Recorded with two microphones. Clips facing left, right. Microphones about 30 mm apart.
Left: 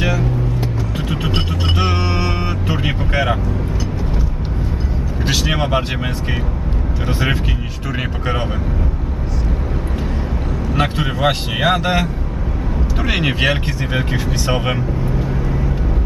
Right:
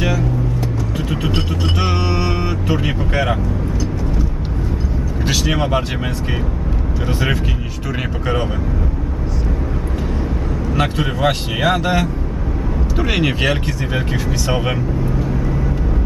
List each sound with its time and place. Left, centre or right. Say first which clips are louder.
0.0 s vehicle: even; centre
0.9 s music: even; centre
1.8 s vehicle: even; centre
5.2 s vehicle: even; centre
7.1 s speech: left 1 dB; centre
10.8 s speech: even; centre